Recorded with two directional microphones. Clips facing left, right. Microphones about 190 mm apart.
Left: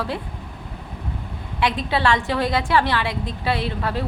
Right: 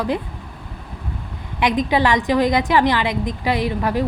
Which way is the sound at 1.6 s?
15° right (ahead or behind).